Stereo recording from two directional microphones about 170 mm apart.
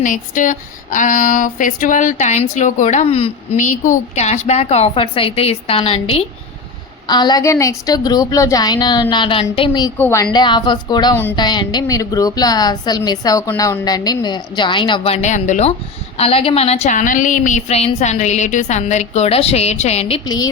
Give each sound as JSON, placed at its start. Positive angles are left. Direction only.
{"t": 0.0, "sound": "a woman's voice", "side_deg": 50}
{"t": 10.0, "sound": "a woman's voice", "side_deg": 15}
{"t": 10.3, "sound": "a woman's voice", "side_deg": 25}
{"t": 20.2, "sound": "a woman's voice", "side_deg": 20}